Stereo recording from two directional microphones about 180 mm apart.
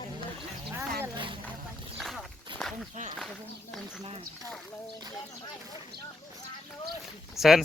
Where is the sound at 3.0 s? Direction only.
40° right (ahead or behind).